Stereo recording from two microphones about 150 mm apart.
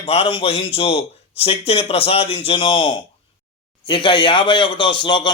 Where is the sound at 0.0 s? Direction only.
40° left (ahead or behind).